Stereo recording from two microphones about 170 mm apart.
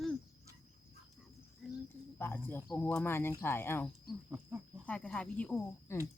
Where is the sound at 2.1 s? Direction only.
10° left (ahead or behind).